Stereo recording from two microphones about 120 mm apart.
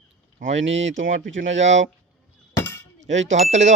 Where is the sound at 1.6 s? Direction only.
75° right (ahead or behind).